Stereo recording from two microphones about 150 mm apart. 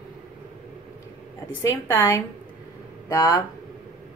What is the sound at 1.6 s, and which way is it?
Speech, 20° left (ahead or behind).